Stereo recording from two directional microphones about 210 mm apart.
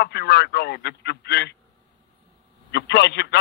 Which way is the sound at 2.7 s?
55° left (ahead or behind).